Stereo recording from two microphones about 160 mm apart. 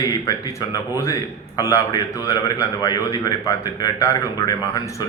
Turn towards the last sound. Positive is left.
turn(degrees=25)  # may be behind; listen again after turning